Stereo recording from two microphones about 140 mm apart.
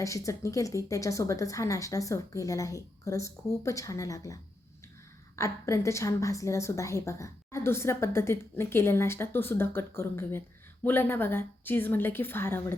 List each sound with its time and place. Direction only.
0.0 s a woman's voice: 25° left (ahead or behind)
5.4 s a woman's voice: 20° left (ahead or behind)